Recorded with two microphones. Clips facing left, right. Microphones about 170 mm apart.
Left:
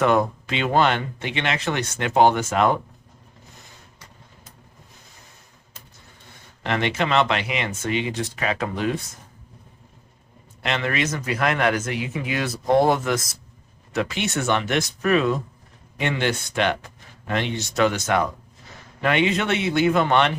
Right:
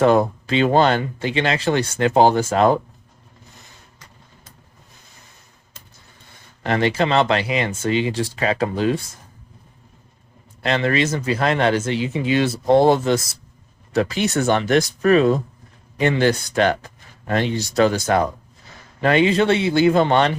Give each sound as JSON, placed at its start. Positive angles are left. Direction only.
{"t": 0.0, "sound": "speech", "side_deg": -30}
{"t": 6.6, "sound": "speech", "side_deg": -35}
{"t": 10.6, "sound": "speech", "side_deg": -35}